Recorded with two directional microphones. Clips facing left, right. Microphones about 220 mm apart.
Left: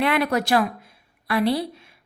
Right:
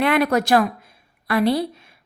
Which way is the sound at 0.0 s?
45° right (ahead or behind).